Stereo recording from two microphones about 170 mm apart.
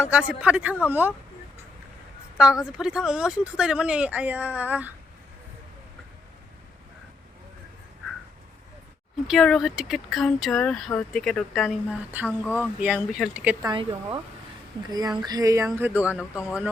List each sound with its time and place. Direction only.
0.0 s speech: 5° right (ahead or behind)
2.7 s speech: 5° right (ahead or behind)
9.2 s speech: centre (ahead or behind)
12.3 s speech: 10° left (ahead or behind)
12.8 s speech: 5° right (ahead or behind)
13.7 s speech: 30° right (ahead or behind); by 16.6 s 5° right (ahead or behind)